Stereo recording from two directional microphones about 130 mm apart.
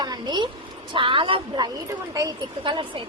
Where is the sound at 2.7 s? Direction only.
40° right (ahead or behind).